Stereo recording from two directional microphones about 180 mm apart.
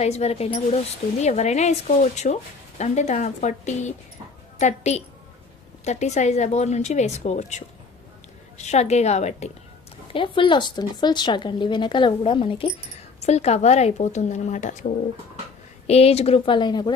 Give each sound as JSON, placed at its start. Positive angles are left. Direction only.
{"t": 0.0, "sound": "speech", "side_deg": 35}